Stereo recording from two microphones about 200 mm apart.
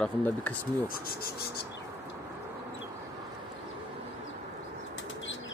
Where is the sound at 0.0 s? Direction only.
10° left (ahead or behind).